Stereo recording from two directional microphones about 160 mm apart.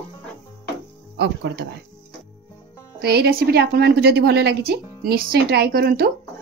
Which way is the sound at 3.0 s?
85° right.